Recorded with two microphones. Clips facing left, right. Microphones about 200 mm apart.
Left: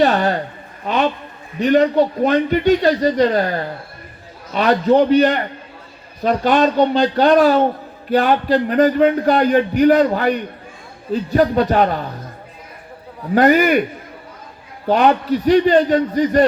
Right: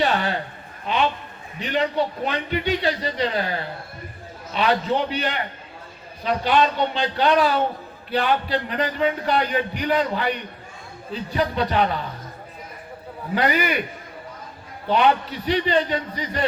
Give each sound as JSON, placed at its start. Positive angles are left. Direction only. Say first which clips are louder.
{"t": 0.0, "sound": "a man's voice", "louder": "left 7 dB", "side_deg": 45}
{"t": 13.3, "sound": "a man's voice", "louder": "left 9 dB", "side_deg": 45}
{"t": 14.8, "sound": "a man's voice", "louder": "left 5 dB", "side_deg": 45}